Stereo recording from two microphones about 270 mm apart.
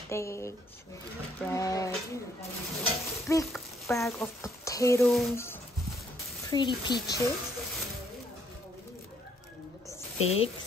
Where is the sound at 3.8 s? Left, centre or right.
Centre.